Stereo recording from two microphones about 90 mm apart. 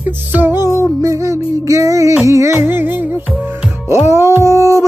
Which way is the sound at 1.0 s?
35° right (ahead or behind).